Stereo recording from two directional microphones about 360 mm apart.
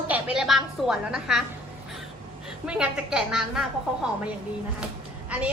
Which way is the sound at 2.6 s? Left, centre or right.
Centre.